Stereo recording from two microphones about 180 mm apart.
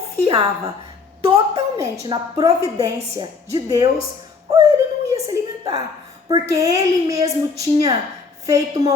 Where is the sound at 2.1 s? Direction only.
20° right (ahead or behind).